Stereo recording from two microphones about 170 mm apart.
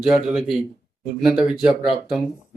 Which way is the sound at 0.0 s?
Centre (ahead or behind).